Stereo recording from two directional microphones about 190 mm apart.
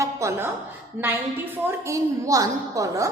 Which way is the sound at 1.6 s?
15° right (ahead or behind).